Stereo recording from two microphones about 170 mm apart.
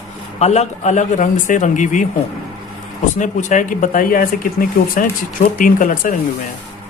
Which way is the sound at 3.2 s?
45° left (ahead or behind).